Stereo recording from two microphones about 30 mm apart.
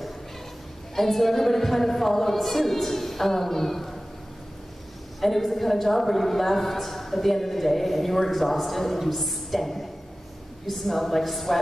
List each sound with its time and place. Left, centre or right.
0.9 s speech: centre
5.2 s a woman's voice: centre